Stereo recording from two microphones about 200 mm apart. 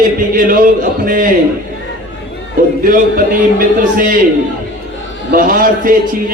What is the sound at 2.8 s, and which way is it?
A man's voice, 45° right (ahead or behind).